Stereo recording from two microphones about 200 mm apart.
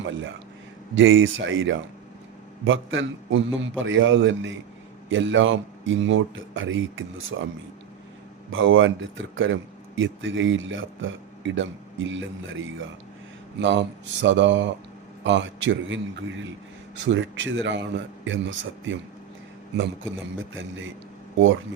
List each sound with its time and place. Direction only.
0.9 s a man's voice: 75° right (ahead or behind)
8.5 s a man's voice: 75° right (ahead or behind)
20.5 s a man's voice: 70° right (ahead or behind)